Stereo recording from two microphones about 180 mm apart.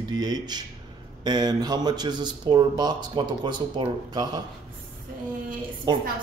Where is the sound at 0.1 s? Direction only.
25° right (ahead or behind).